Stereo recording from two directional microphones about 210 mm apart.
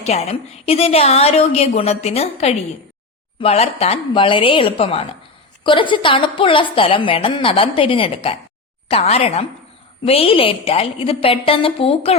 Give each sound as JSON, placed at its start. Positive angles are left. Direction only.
{"t": 0.0, "sound": "a woman's voice", "side_deg": 30}